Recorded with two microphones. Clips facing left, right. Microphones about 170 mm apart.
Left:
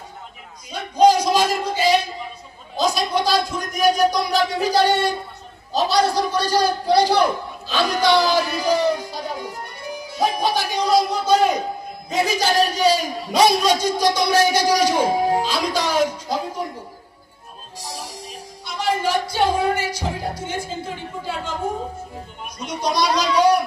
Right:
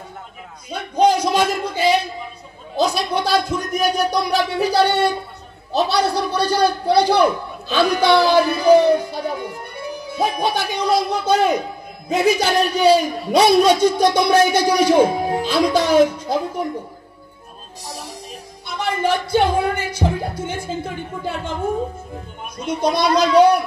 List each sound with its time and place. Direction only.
0.7 s a sound: 55° right (ahead or behind)
5.7 s a man's voice: 60° right (ahead or behind)
17.8 s music: 55° right (ahead or behind)
18.7 s speech: 55° right (ahead or behind)
22.7 s a man's voice: 55° right (ahead or behind)